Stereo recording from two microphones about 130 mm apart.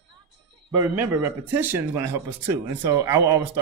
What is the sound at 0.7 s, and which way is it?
Speech, 20° right (ahead or behind).